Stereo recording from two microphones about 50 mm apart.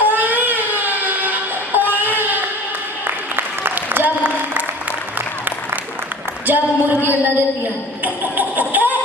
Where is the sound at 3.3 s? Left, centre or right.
Right.